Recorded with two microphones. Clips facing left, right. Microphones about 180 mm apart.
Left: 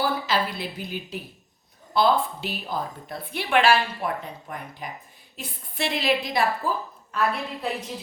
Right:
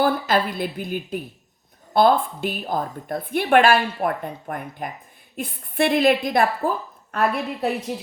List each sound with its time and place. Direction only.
0.0 s a woman's voice: 50° right (ahead or behind)